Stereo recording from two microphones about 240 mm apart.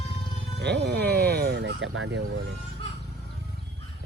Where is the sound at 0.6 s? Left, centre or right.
Right.